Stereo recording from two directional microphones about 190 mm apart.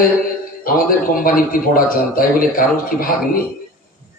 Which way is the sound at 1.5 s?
50° left (ahead or behind).